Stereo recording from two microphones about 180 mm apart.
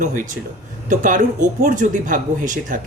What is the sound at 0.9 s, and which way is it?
Speech, 45° right (ahead or behind).